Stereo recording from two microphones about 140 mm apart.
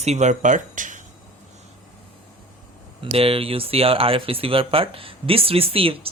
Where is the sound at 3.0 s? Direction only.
45° right (ahead or behind).